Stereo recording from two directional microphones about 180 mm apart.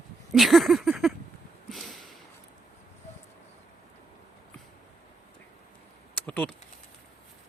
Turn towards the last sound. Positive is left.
turn(degrees=10)  # may be behind; listen again after turning